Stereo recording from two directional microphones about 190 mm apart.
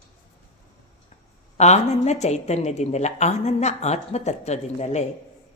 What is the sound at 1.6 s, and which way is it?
A woman's voice, 35° left (ahead or behind).